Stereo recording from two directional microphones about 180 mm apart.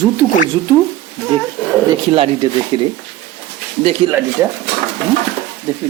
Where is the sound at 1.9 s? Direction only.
20° right (ahead or behind).